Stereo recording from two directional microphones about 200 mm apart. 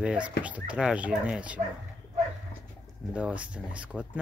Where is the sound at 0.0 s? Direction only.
5° right (ahead or behind).